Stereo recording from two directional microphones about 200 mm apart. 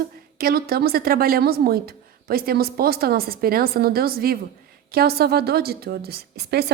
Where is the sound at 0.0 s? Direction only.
50° right (ahead or behind).